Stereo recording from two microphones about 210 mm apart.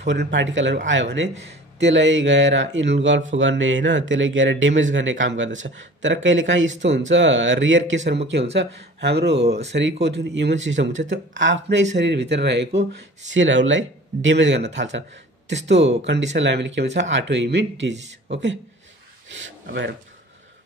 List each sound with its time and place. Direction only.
0.0 s speech: 55° right (ahead or behind)